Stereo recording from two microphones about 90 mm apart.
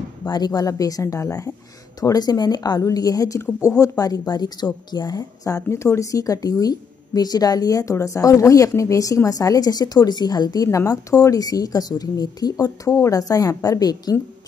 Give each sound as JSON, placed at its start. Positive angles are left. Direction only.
{"t": 0.3, "sound": "speech", "side_deg": 45}